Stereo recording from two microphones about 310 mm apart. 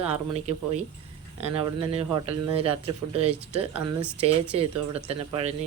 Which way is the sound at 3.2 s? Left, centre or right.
Right.